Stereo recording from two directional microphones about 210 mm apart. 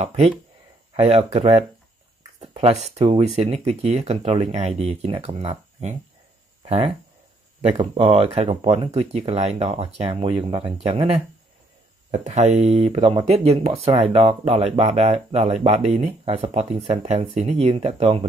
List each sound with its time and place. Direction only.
0.0 s speech: 30° right (ahead or behind)